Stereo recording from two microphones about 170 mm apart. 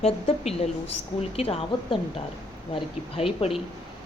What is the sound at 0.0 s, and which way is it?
Speech, 35° left (ahead or behind).